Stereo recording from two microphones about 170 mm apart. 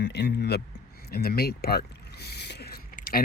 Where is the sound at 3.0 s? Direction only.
60° left (ahead or behind).